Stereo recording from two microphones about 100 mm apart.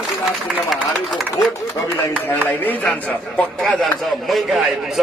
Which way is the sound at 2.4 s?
20° left (ahead or behind).